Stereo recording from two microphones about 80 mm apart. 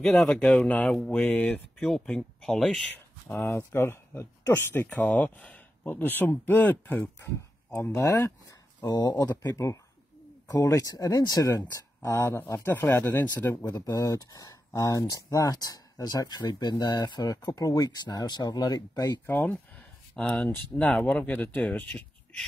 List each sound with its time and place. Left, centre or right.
0.0 s speech: centre
3.3 s speech: left
4.8 s speech: centre
7.9 s speech: left
8.8 s speech: left
9.4 s speech: left
11.7 s speech: left
14.1 s speech: left
19.2 s speech: left